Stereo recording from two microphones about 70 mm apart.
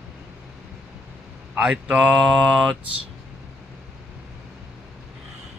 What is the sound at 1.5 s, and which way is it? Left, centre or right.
Speech, centre.